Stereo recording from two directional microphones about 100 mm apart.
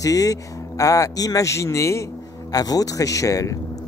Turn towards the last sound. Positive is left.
turn(degrees=35)  # may be behind; listen again after turning